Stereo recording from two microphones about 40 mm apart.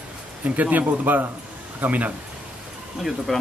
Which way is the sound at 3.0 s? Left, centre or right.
Centre.